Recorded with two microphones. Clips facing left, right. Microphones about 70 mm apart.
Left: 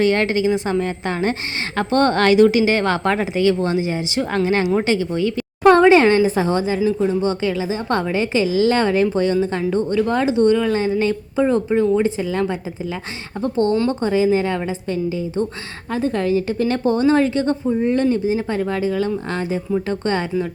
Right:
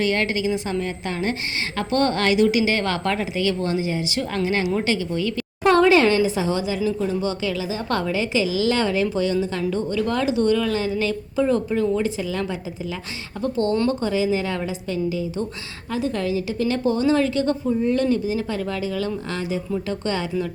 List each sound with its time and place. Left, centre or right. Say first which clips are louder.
0.0 s a woman's voice: left 5 dB; left